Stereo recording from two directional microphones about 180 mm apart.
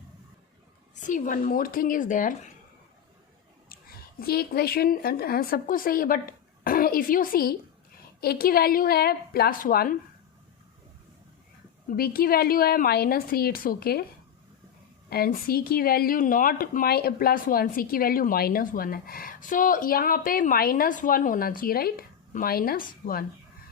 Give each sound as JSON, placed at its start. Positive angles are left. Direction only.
{"t": 0.9, "sound": "speech", "side_deg": 45}
{"t": 3.7, "sound": "a woman's voice", "side_deg": 55}
{"t": 11.9, "sound": "a woman's voice", "side_deg": 55}
{"t": 15.1, "sound": "speech", "side_deg": 55}